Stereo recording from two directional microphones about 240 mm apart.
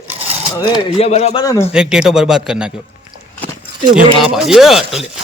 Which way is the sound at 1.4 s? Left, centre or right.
Centre.